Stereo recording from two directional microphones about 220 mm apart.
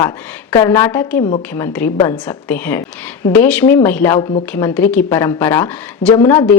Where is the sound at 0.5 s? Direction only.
15° left (ahead or behind).